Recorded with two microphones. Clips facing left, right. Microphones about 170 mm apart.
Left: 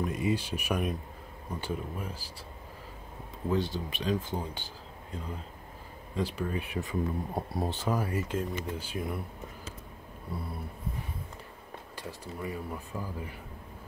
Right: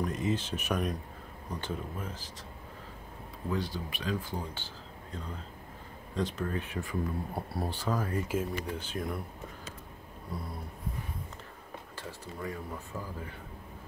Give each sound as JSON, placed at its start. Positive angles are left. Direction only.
{"t": 0.0, "sound": "speech", "side_deg": 10}
{"t": 3.4, "sound": "speech", "side_deg": 25}
{"t": 6.1, "sound": "speech", "side_deg": 10}
{"t": 12.0, "sound": "speech", "side_deg": 15}